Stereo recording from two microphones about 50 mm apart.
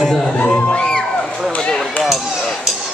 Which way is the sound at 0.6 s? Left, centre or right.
Centre.